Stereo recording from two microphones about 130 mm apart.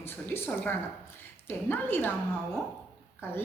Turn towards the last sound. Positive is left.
turn(degrees=15)  # may be behind; listen again after turning